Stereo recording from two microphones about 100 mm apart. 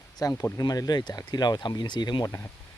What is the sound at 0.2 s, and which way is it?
Speech, 40° left (ahead or behind).